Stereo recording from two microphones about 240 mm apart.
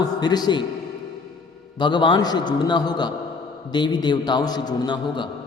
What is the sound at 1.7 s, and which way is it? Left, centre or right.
A man's voice, centre.